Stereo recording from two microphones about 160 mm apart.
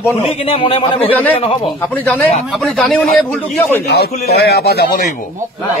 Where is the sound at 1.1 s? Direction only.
10° left (ahead or behind).